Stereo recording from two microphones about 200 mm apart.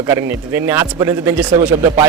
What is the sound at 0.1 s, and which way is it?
A man's voice, 10° right (ahead or behind).